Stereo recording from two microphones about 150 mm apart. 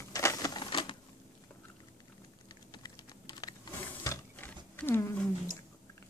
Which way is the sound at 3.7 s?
20° left (ahead or behind).